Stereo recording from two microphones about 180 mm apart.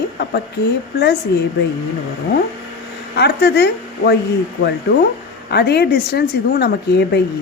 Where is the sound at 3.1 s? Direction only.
70° left (ahead or behind).